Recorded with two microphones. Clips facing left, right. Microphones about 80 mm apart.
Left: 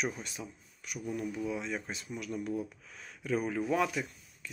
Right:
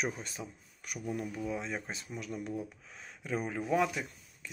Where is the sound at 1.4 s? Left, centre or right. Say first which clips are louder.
Left 1 dB; right.